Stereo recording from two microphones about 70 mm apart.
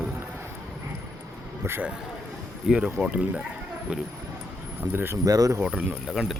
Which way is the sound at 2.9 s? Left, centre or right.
Centre.